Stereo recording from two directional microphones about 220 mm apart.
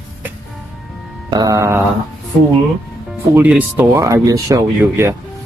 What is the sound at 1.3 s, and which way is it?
Speech, 15° right (ahead or behind).